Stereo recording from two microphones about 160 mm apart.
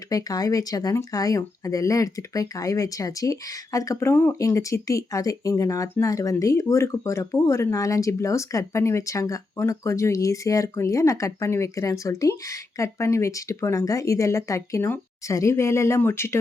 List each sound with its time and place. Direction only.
0.1 s speech: 25° left (ahead or behind)